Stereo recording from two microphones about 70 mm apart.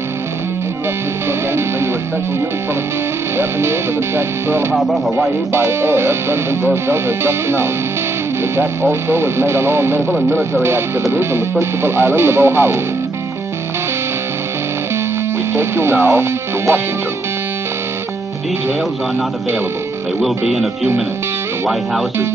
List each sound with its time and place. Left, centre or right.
3.3 s speech: right
4.7 s speech: centre
5.5 s speech: right
15.5 s speech: right
20.2 s speech: centre